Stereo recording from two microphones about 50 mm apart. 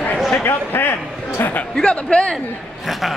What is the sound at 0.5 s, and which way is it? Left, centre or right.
Music, left.